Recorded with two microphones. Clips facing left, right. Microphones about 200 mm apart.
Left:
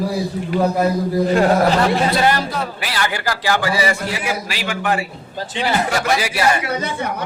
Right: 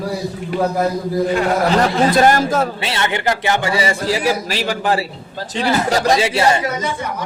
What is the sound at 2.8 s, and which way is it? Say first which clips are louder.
A man's voice: right 2 dB; 25° right (ahead or behind).